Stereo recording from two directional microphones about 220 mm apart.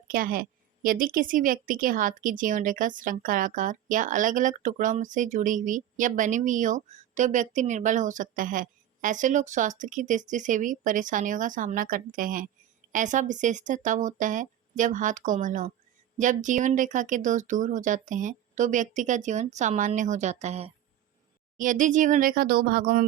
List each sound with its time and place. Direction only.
0.1 s a woman's voice: 40° right (ahead or behind)